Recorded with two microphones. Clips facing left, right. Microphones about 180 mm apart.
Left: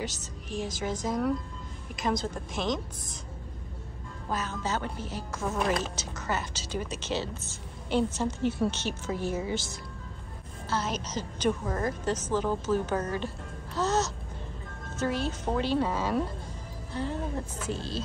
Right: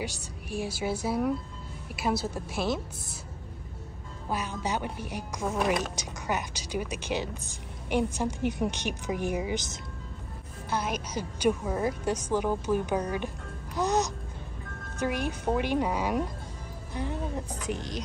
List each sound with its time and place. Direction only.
0.0 s speech: 10° right (ahead or behind)
4.3 s speech: 15° right (ahead or behind)
13.7 s music: 15° right (ahead or behind)
15.0 s speech: 15° right (ahead or behind)